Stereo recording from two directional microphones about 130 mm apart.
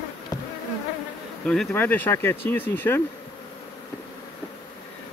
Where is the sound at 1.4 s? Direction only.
5° left (ahead or behind).